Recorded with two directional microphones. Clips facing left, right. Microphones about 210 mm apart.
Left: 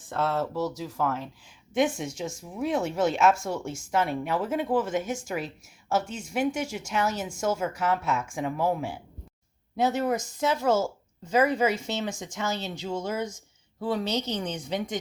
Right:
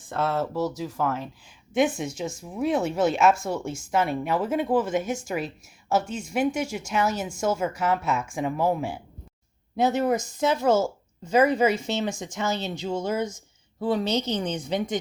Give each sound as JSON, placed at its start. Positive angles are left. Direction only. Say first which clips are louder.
{"t": 0.1, "sound": "speech", "louder": "right 1 dB", "side_deg": -5}